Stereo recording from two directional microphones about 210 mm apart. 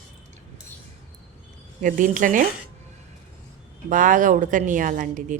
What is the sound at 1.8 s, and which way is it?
Speech, 40° right (ahead or behind).